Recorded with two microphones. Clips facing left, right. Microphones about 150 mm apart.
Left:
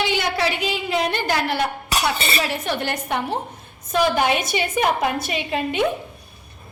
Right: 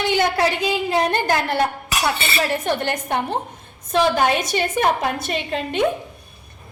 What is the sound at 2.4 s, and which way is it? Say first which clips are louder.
Speech: right 3 dB; 50° right (ahead or behind).